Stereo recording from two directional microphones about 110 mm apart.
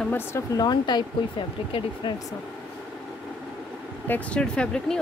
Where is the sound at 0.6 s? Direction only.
40° left (ahead or behind).